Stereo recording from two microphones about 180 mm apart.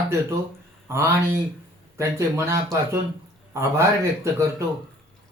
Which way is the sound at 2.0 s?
15° right (ahead or behind).